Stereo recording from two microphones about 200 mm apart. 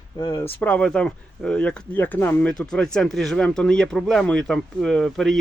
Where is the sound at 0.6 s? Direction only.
5° left (ahead or behind).